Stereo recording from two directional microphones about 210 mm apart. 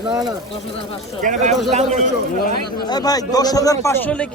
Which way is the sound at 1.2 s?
35° right (ahead or behind).